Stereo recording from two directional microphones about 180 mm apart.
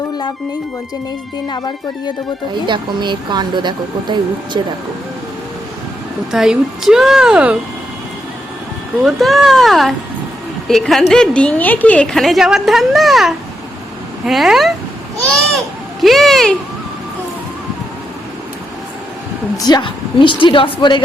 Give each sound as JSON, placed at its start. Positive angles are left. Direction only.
{"t": 1.5, "sound": "a woman's voice", "side_deg": 25}
{"t": 2.6, "sound": "speech", "side_deg": -25}
{"t": 6.3, "sound": "a woman's voice", "side_deg": 0}
{"t": 9.0, "sound": "a woman's voice", "side_deg": 0}
{"t": 19.5, "sound": "a woman's voice", "side_deg": 25}